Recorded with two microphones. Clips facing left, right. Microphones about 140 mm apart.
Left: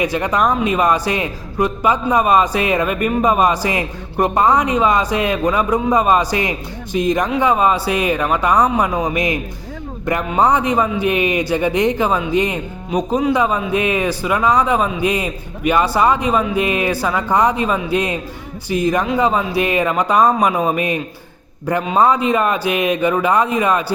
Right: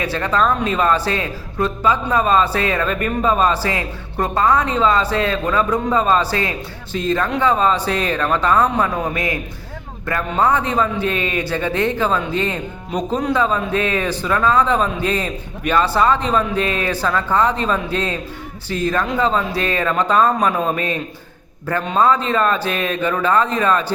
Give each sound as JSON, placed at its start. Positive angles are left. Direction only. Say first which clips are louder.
{"t": 0.0, "sound": "a man's voice", "louder": "left 2 dB", "side_deg": 15}